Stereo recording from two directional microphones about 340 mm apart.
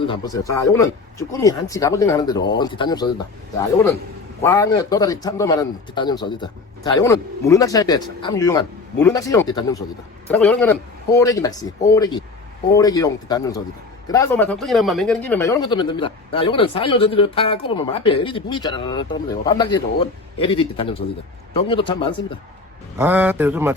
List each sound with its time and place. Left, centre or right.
0.1 s a man's voice: centre
4.4 s a man's voice: centre
23.0 s speech: centre